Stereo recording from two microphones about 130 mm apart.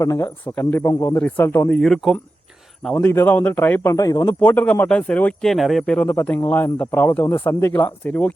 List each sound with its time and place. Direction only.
0.0 s speech: 25° left (ahead or behind)
0.3 s speech: 10° left (ahead or behind)
1.2 s speech: 15° left (ahead or behind)
1.8 s speech: centre (ahead or behind)
3.1 s speech: 15° left (ahead or behind)
3.9 s speech: 30° left (ahead or behind)
4.3 s speech: 10° left (ahead or behind)